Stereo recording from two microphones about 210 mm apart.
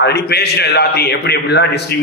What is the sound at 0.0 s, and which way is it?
A man's voice, 50° left (ahead or behind).